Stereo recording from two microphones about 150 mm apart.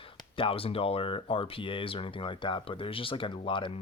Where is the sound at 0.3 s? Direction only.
40° left (ahead or behind).